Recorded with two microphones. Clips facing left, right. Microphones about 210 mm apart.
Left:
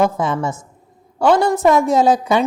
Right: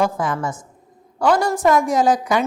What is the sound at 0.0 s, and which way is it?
A woman's voice, 25° left (ahead or behind).